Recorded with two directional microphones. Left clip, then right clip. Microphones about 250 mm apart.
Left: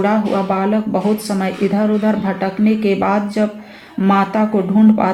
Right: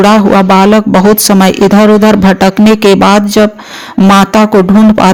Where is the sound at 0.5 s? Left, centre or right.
Right.